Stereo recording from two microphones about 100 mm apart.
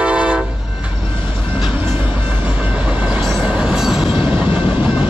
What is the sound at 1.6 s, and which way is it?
Train, 15° right (ahead or behind).